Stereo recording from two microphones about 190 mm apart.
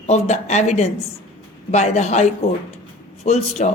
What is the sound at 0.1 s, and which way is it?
A woman's voice, 35° left (ahead or behind).